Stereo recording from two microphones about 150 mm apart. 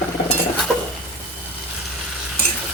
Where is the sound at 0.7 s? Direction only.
Centre (ahead or behind).